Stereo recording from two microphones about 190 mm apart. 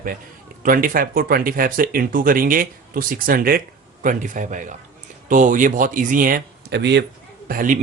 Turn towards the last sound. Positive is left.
turn(degrees=-45)  # may be behind; listen again after turning